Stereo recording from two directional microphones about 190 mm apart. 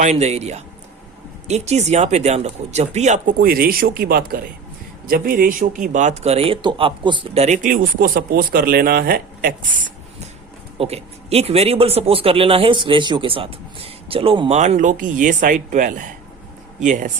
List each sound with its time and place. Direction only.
0.0 s a man's voice: 35° right (ahead or behind); by 9.6 s 50° right (ahead or behind)
10.8 s a man's voice: 35° right (ahead or behind)